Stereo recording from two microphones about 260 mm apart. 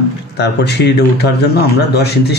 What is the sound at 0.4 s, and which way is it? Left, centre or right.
A man's voice, left.